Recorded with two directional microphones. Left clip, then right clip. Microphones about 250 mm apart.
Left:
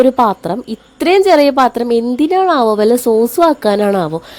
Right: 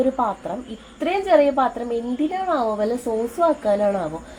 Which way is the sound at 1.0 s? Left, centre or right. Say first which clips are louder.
Left 8 dB; left.